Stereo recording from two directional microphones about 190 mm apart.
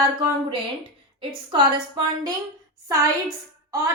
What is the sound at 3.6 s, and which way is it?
Speech, 15° right (ahead or behind).